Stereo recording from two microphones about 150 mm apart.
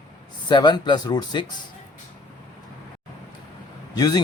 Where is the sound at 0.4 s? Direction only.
30° left (ahead or behind).